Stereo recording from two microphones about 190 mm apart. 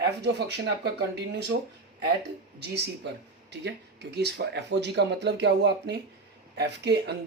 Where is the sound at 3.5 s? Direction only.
65° right (ahead or behind).